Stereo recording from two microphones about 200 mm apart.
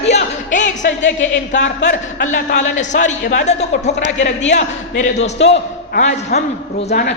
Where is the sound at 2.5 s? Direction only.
35° left (ahead or behind).